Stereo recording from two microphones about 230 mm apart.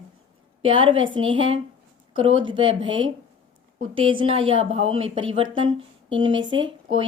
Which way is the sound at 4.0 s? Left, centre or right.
Right.